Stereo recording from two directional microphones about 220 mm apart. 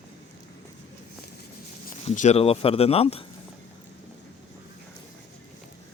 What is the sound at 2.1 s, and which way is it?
Speech, 30° left (ahead or behind).